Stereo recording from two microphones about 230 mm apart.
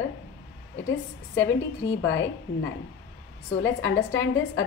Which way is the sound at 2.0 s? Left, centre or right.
Left.